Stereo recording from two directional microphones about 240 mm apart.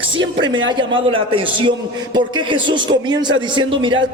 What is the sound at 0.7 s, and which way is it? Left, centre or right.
A man's voice, centre.